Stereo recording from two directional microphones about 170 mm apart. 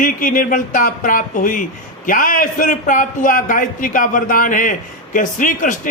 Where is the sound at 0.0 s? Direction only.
50° left (ahead or behind).